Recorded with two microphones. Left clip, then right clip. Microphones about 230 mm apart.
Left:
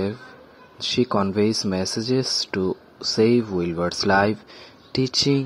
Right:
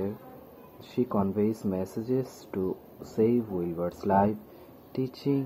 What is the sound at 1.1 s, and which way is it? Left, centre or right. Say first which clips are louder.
Speech: left 7 dB; left.